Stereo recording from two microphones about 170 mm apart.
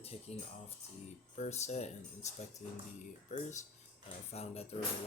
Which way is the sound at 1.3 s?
40° left (ahead or behind).